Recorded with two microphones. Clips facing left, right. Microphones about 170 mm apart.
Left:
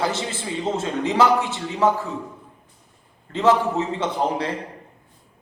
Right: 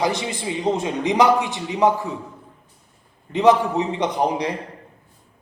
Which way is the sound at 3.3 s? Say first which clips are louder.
Right 3 dB; 15° right (ahead or behind).